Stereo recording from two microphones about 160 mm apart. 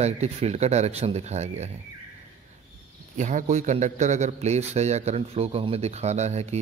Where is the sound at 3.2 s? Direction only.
50° right (ahead or behind).